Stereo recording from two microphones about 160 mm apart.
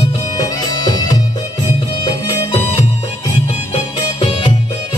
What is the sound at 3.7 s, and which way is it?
Music, 30° left (ahead or behind).